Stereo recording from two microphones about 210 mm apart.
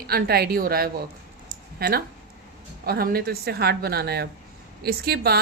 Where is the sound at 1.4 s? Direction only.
45° right (ahead or behind).